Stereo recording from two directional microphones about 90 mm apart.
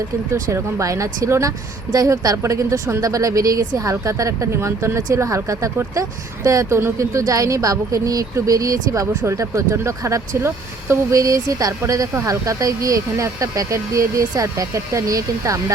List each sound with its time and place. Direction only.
0.5 s speech: 35° right (ahead or behind)